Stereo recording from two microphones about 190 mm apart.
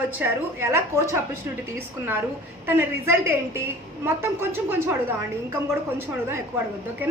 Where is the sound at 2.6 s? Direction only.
10° right (ahead or behind).